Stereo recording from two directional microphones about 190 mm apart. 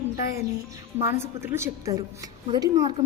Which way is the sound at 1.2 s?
15° right (ahead or behind).